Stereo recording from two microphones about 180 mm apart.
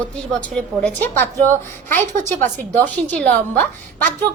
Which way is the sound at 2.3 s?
10° left (ahead or behind).